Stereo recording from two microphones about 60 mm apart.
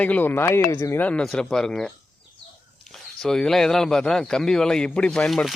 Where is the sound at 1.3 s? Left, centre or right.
Centre.